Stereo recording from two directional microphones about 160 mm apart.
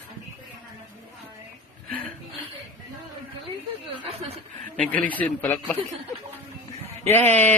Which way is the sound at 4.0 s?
40° right (ahead or behind).